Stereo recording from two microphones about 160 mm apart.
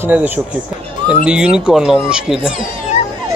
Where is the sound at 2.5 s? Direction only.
45° left (ahead or behind).